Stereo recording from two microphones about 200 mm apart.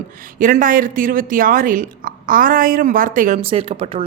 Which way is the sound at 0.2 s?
40° right (ahead or behind).